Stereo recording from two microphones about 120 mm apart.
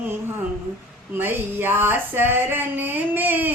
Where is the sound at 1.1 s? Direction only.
20° right (ahead or behind).